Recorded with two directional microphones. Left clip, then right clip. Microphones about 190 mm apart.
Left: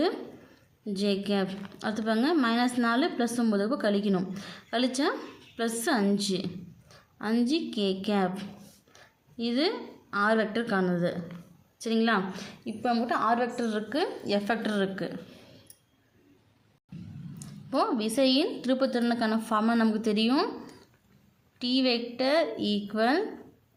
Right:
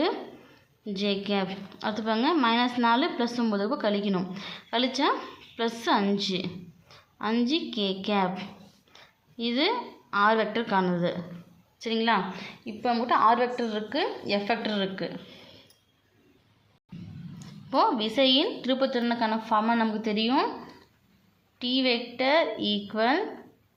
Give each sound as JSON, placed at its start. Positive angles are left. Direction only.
{"t": 0.9, "sound": "a woman's voice", "side_deg": 15}
{"t": 17.4, "sound": "a woman's voice", "side_deg": 20}
{"t": 21.6, "sound": "a woman's voice", "side_deg": 20}